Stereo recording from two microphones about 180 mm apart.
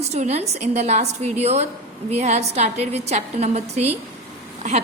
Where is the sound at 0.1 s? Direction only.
35° right (ahead or behind).